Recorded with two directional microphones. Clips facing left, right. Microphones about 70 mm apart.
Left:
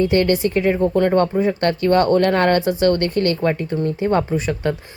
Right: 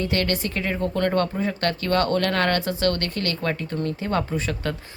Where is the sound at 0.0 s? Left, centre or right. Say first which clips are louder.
Left 8 dB; left.